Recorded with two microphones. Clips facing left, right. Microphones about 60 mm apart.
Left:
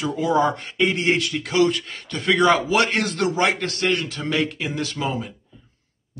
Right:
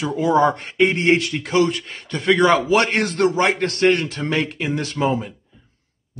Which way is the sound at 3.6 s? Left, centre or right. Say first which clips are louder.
Right 6 dB; right.